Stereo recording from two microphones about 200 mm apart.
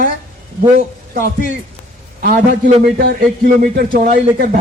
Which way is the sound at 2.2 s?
45° right (ahead or behind).